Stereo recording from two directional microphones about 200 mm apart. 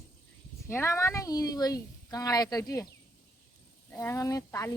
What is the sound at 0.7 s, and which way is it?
Speech, 15° left (ahead or behind).